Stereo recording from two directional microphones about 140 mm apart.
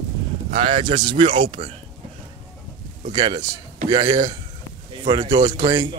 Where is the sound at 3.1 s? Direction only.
35° right (ahead or behind).